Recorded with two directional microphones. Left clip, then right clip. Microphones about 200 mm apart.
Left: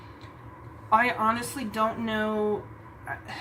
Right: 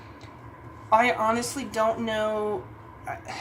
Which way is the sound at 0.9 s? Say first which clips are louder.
Right 2 dB; 30° right (ahead or behind).